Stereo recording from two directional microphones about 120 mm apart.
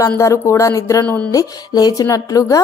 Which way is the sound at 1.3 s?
30° left (ahead or behind).